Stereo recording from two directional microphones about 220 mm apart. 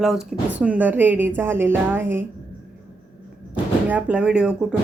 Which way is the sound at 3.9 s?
5° right (ahead or behind).